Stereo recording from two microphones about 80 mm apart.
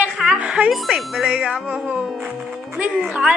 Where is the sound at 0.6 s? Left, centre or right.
Centre.